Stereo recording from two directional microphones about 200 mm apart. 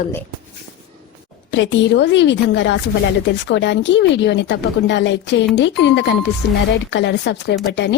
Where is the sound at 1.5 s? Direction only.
65° left (ahead or behind).